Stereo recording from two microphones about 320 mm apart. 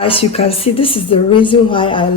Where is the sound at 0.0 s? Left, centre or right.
Centre.